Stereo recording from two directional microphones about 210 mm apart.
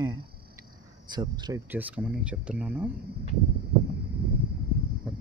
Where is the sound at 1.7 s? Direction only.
5° right (ahead or behind).